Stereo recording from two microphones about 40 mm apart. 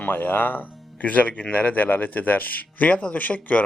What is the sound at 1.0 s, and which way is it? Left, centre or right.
A man's voice, left.